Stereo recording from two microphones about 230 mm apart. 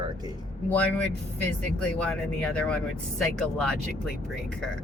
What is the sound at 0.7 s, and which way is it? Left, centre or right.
Speech, centre.